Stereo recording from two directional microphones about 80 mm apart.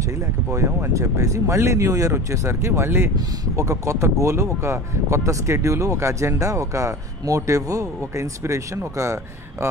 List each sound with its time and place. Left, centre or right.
0.9 s speech: right